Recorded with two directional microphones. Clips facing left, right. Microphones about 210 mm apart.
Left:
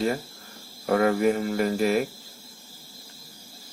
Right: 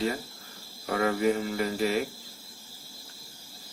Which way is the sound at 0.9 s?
50° left (ahead or behind).